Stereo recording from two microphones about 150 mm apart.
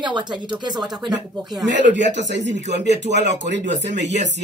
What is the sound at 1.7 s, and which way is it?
Speech, 55° right (ahead or behind).